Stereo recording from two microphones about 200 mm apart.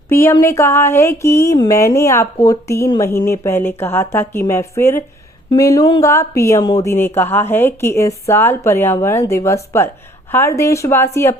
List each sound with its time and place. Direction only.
0.1 s speech: 15° left (ahead or behind)